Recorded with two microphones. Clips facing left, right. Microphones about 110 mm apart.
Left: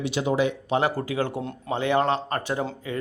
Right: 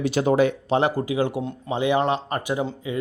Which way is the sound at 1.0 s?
15° right (ahead or behind).